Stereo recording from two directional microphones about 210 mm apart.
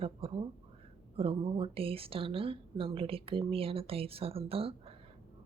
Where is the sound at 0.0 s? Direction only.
25° right (ahead or behind).